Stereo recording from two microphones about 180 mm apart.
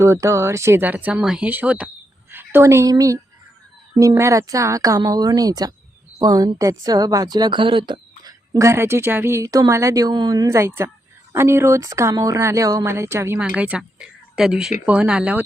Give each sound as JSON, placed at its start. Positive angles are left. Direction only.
{"t": 0.0, "sound": "a woman's voice", "side_deg": -15}